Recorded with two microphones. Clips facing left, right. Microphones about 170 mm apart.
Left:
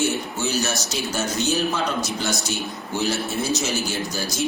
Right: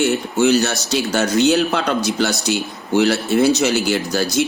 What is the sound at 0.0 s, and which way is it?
Speech, 65° right (ahead or behind).